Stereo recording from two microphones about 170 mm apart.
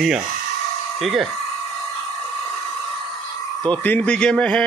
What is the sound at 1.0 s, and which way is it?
Speech, centre (ahead or behind).